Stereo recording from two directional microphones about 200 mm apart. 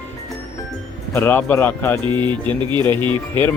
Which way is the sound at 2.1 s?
25° right (ahead or behind).